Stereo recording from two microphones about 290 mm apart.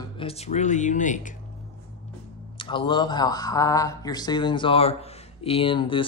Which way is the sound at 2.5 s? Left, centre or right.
Centre.